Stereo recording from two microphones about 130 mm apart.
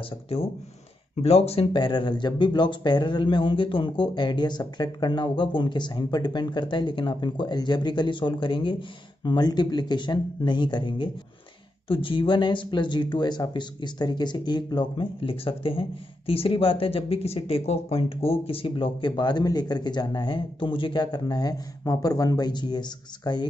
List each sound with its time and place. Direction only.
1.2 s speech: 50° left (ahead or behind); by 23.5 s 35° left (ahead or behind)